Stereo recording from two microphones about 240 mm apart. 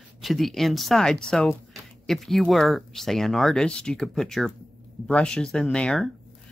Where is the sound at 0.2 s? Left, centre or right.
Centre.